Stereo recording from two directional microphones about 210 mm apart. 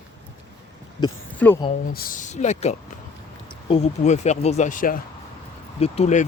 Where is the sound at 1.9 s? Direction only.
35° left (ahead or behind).